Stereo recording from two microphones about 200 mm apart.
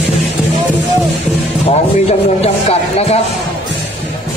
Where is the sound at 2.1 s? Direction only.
30° left (ahead or behind).